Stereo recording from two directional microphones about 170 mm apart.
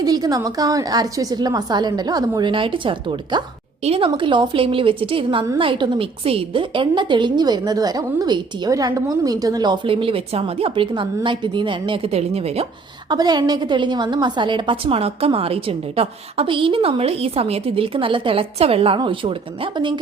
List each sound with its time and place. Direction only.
0.0 s a woman's voice: 25° right (ahead or behind)
13.1 s a woman's voice: 25° right (ahead or behind)